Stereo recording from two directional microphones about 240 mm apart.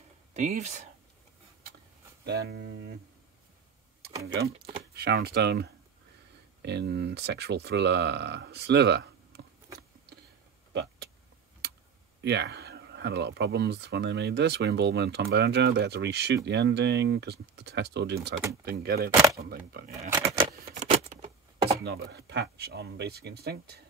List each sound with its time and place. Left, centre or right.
0.3 s speech: right
2.2 s speech: right
4.5 s speech: right
4.9 s speech: right
10.7 s vehicle: right
12.2 s speech: right
20.1 s a sound: centre
20.6 s a sound: right
21.7 s speech: right